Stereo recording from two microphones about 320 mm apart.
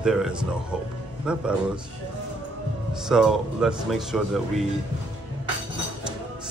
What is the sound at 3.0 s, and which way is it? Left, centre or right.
Speech, centre.